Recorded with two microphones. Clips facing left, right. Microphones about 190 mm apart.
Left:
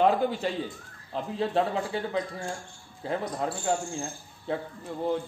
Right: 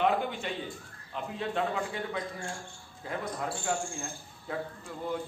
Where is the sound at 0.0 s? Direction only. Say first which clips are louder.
Left 5 dB; 35° left (ahead or behind).